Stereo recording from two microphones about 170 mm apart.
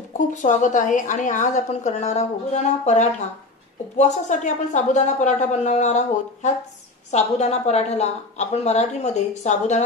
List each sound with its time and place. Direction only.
0.3 s a woman's voice: 45° left (ahead or behind)